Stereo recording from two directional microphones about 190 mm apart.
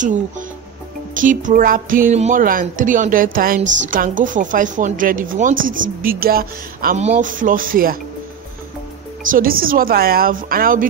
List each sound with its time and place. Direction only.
1.1 s speech: 45° right (ahead or behind)
7.0 s speech: 40° right (ahead or behind)
9.2 s speech: 45° right (ahead or behind)